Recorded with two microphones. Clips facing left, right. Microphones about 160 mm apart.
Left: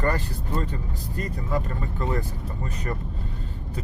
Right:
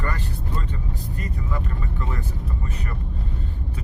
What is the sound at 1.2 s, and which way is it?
Speech, 35° left (ahead or behind).